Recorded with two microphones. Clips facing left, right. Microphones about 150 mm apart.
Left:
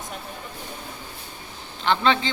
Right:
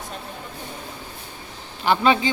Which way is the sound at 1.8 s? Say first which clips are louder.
Right 3 dB; 10° right (ahead or behind).